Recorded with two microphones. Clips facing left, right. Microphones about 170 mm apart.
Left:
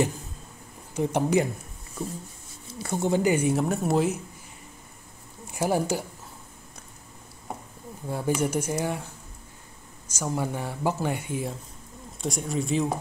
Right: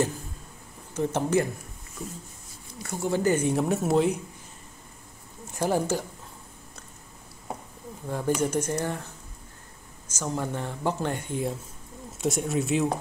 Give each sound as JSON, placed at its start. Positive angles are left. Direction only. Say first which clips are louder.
{"t": 0.9, "sound": "speech", "louder": "left 1 dB", "side_deg": 15}
{"t": 2.8, "sound": "speech", "louder": "left 4 dB", "side_deg": 30}
{"t": 3.1, "sound": "speech", "louder": "left 1 dB", "side_deg": 15}
{"t": 5.5, "sound": "speech", "louder": "even", "side_deg": 10}
{"t": 8.1, "sound": "speech", "louder": "even", "side_deg": 10}
{"t": 10.1, "sound": "speech", "louder": "left 1 dB", "side_deg": 10}